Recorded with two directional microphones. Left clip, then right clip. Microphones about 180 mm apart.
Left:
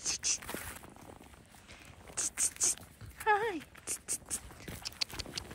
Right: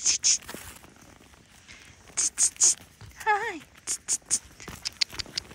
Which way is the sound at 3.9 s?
55° left (ahead or behind).